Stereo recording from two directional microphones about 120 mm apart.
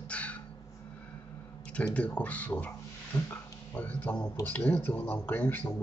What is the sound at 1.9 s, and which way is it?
Speech, 10° left (ahead or behind).